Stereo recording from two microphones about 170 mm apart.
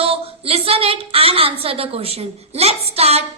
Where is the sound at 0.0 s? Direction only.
35° right (ahead or behind).